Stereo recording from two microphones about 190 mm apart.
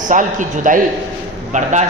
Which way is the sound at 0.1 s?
45° right (ahead or behind).